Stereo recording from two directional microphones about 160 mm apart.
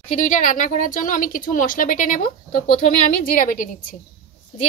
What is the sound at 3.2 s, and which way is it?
Speech, 60° left (ahead or behind).